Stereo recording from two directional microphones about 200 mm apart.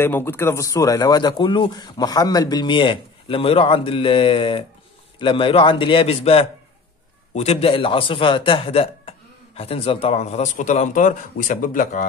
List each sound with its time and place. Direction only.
0.0 s a man's voice: 10° left (ahead or behind); by 12.0 s 40° left (ahead or behind)